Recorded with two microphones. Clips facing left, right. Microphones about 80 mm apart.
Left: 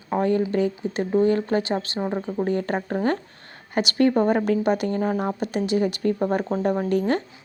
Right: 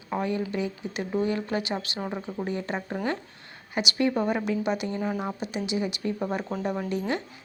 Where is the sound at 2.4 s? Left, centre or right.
Left.